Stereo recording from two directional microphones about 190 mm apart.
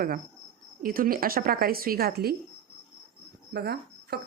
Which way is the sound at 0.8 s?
50° right (ahead or behind).